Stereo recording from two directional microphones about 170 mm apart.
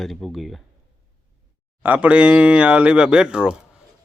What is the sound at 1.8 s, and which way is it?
Speech, 10° right (ahead or behind).